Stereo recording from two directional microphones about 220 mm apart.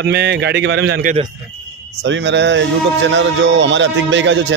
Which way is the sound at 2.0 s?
55° right (ahead or behind).